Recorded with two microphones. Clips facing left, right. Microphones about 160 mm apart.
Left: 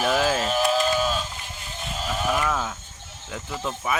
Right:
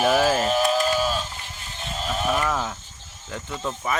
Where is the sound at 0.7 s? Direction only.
10° right (ahead or behind).